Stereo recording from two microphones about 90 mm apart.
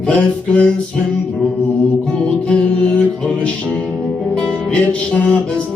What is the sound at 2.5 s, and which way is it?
Music, 10° left (ahead or behind).